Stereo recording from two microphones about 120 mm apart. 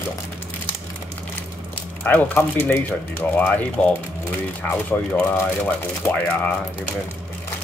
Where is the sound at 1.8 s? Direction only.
15° left (ahead or behind).